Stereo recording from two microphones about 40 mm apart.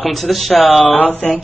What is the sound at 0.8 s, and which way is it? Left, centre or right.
Speech, left.